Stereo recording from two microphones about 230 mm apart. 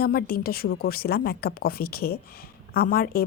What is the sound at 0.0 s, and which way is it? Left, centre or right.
A woman's voice, left.